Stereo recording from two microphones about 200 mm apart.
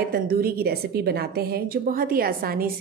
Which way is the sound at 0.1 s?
50° right (ahead or behind).